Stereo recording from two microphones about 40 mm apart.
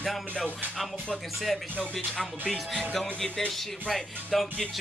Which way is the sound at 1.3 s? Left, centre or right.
Centre.